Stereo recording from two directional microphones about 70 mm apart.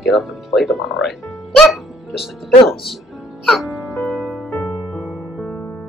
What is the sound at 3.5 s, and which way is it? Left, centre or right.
Music, centre.